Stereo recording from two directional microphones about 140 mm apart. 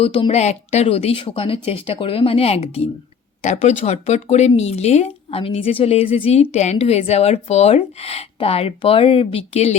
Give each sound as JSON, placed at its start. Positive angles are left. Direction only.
{"t": 0.0, "sound": "speech", "side_deg": 45}